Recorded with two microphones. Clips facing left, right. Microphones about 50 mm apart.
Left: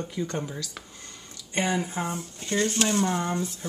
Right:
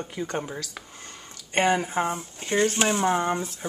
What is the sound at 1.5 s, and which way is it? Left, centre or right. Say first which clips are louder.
Speech: right 5 dB; right.